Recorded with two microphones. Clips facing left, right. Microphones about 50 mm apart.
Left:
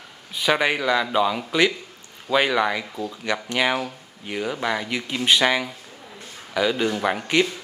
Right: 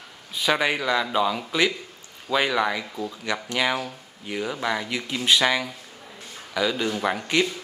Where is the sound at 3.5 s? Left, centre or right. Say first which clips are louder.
Left 2 dB; centre.